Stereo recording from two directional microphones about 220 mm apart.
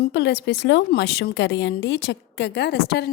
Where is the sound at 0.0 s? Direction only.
50° left (ahead or behind).